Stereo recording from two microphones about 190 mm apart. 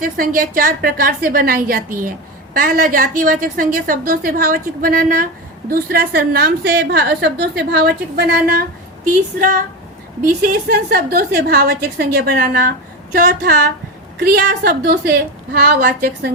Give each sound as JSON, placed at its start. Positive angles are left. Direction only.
{"t": 0.0, "sound": "a woman's voice", "side_deg": -45}
{"t": 10.2, "sound": "a woman's voice", "side_deg": -50}